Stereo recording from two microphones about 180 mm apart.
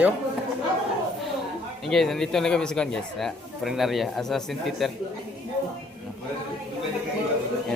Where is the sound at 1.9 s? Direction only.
Centre (ahead or behind).